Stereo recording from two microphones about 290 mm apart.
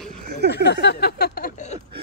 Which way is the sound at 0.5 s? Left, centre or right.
Left.